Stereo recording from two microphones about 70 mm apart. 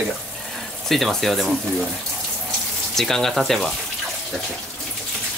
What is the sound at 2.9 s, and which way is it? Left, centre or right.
Speech, centre.